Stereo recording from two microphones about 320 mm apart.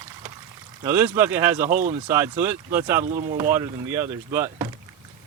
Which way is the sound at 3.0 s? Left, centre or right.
Right.